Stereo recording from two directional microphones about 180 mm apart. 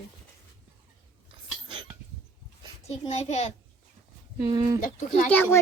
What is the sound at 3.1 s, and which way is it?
Speech, 35° left (ahead or behind).